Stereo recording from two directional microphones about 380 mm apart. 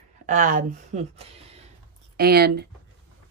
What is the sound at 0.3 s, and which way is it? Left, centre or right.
A woman's voice, centre.